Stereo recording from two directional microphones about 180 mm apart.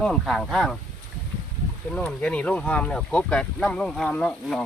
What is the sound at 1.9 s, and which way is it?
Speech, 5° left (ahead or behind).